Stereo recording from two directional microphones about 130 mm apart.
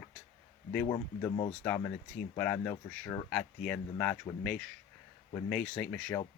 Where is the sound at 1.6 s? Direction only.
15° left (ahead or behind).